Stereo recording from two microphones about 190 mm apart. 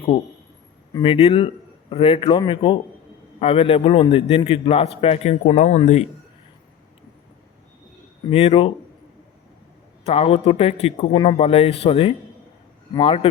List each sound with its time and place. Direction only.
0.9 s a man's voice: 25° left (ahead or behind)
8.3 s a man's voice: 30° left (ahead or behind)
10.1 s a man's voice: 30° left (ahead or behind)